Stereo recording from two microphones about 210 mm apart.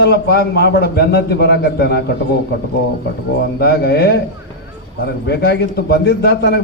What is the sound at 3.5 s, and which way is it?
Speech, 50° left (ahead or behind).